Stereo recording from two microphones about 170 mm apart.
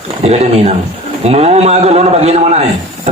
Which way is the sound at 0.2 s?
40° right (ahead or behind).